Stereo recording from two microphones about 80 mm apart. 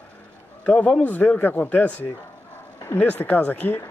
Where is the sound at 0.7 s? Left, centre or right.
Centre.